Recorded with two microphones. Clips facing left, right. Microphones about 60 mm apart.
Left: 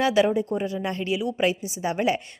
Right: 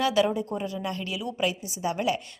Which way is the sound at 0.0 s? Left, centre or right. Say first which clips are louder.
Left 3 dB; left.